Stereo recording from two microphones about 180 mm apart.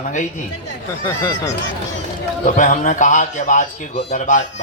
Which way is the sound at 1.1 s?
20° left (ahead or behind).